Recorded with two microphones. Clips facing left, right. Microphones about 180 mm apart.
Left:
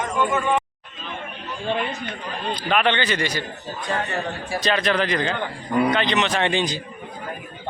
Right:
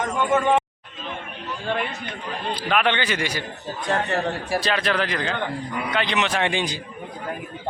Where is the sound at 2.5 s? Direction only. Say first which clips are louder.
Left 1 dB; 5° right (ahead or behind).